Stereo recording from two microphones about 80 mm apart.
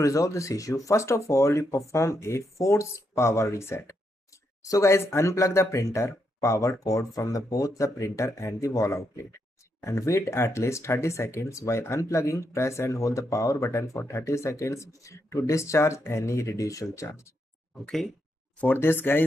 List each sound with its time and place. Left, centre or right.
0.0 s speech: left
18.6 s speech: left